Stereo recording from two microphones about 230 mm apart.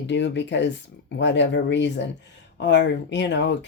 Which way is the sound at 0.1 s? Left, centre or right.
Left.